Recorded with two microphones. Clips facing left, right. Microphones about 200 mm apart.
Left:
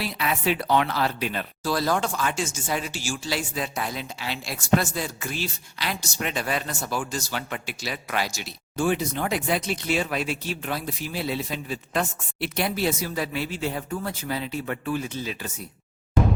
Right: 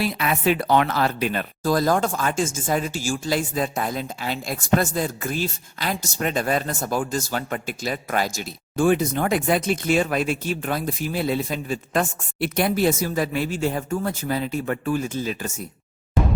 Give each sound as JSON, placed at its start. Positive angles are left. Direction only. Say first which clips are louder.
{"t": 0.0, "sound": "speech", "louder": "right 4 dB", "side_deg": -50}